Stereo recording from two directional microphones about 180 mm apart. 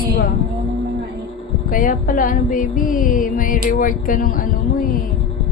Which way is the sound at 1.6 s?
50° left (ahead or behind).